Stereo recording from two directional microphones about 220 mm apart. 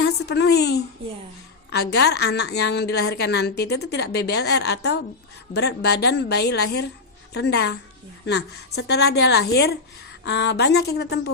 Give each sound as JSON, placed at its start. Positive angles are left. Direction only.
{"t": 0.0, "sound": "a woman's voice", "side_deg": 50}